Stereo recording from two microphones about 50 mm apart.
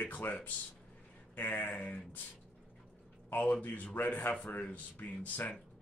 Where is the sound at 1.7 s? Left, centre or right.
Left.